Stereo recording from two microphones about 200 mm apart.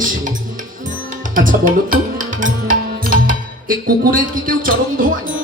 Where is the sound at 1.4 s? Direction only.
45° right (ahead or behind).